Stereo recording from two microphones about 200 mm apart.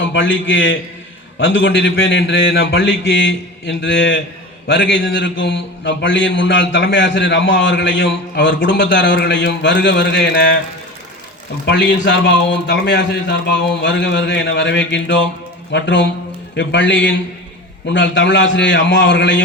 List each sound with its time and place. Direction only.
0.0 s a man's voice: 70° left (ahead or behind)
11.6 s a man's voice: 60° left (ahead or behind)